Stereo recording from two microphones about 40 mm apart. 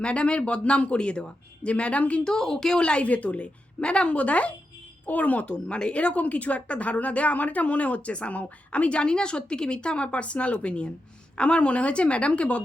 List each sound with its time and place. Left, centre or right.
0.0 s a woman's voice: left
2.2 s speech: centre
2.8 s a woman's voice: left